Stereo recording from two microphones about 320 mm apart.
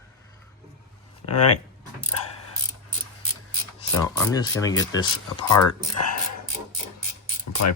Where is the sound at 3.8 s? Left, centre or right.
Centre.